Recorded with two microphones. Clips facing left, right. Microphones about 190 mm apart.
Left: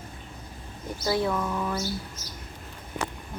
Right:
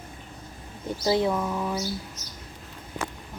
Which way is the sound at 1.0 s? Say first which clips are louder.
Right 2 dB; 20° right (ahead or behind).